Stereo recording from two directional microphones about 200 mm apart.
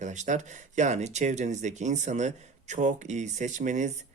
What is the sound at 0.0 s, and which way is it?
Speech, 35° right (ahead or behind).